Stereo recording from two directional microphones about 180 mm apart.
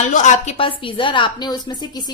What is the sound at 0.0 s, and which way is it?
A woman's voice, 40° left (ahead or behind).